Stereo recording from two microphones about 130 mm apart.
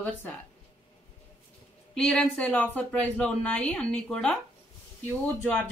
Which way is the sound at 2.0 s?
5° left (ahead or behind).